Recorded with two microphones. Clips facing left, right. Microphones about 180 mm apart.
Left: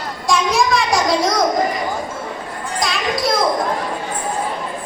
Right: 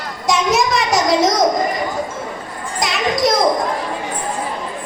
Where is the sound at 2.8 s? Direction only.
20° right (ahead or behind).